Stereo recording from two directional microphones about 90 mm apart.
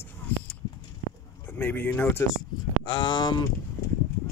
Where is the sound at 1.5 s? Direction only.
20° left (ahead or behind).